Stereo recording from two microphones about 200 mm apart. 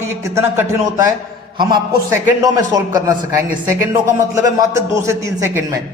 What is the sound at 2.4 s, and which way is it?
Speech, 15° right (ahead or behind).